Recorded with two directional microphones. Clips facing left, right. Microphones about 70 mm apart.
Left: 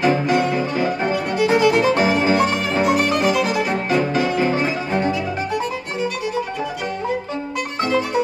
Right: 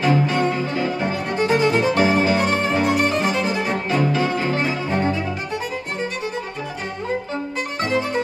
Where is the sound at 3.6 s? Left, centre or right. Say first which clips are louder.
Left 2 dB; centre.